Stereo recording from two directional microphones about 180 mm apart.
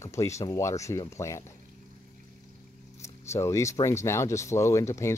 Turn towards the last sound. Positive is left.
turn(degrees=15)  # may be behind; listen again after turning